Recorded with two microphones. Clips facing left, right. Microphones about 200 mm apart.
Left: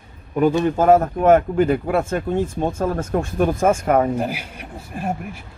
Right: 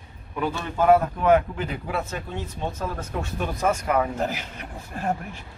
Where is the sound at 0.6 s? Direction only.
45° left (ahead or behind).